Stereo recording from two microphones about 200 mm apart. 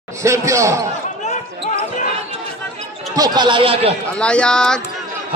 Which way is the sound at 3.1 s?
20° right (ahead or behind).